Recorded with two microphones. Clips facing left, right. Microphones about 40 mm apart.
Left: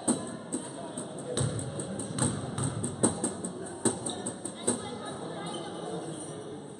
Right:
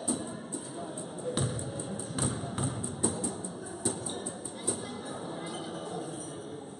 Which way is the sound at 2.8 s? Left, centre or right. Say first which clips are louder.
Left 3 dB; left.